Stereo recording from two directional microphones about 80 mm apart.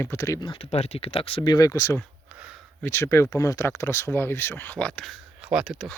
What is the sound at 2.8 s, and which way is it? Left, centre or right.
Speech, left.